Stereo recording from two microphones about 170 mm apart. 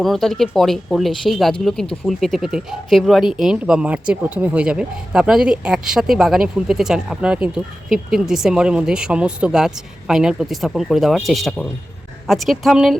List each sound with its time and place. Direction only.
0.0 s speech: centre (ahead or behind)